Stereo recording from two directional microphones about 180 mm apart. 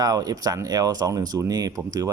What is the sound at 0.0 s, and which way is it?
Speech, 20° right (ahead or behind).